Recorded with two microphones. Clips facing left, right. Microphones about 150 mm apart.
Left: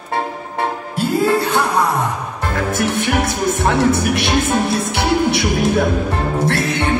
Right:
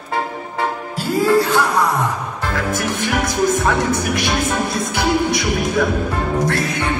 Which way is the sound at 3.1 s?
30° left (ahead or behind).